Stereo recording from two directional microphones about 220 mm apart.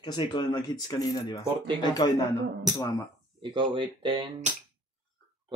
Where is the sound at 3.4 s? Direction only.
20° right (ahead or behind).